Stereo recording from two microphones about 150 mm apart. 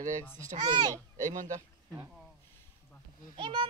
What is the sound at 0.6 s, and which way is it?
Speech, 30° right (ahead or behind).